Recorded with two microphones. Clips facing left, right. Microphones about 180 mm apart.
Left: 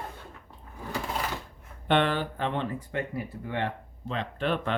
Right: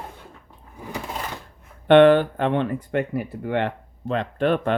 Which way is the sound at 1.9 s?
60° right (ahead or behind).